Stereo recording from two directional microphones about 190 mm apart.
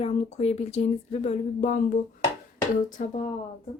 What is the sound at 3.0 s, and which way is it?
Speech, 45° left (ahead or behind).